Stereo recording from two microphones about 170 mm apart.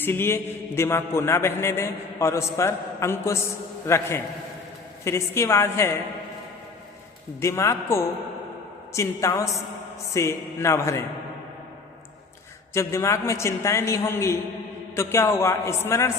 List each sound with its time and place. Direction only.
0.0 s a man's voice: 15° left (ahead or behind)
7.4 s a man's voice: 15° left (ahead or behind)
12.7 s a man's voice: 15° left (ahead or behind)